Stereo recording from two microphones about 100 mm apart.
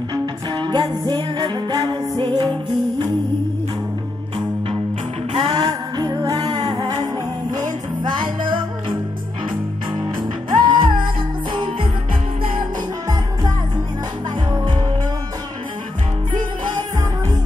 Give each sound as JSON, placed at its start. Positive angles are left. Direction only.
{"t": 0.1, "sound": "music", "side_deg": -45}
{"t": 5.3, "sound": "music", "side_deg": -55}
{"t": 10.5, "sound": "music", "side_deg": -50}